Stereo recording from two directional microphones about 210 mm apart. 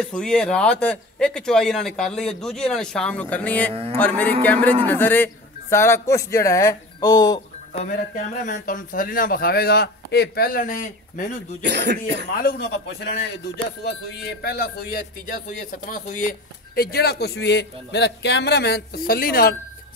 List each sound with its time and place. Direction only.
0.0 s speech: 5° left (ahead or behind)
3.7 s speech: 30° right (ahead or behind)
4.0 s a man's voice: 10° left (ahead or behind)
7.9 s speech: 40° left (ahead or behind)
11.7 s speech: 55° right (ahead or behind)
12.4 s speech: 50° left (ahead or behind)
14.4 s speech: 50° left (ahead or behind)